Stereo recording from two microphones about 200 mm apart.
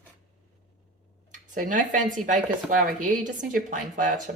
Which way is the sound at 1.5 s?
40° right (ahead or behind).